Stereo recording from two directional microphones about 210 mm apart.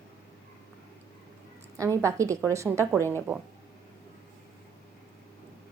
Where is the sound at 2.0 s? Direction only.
15° right (ahead or behind).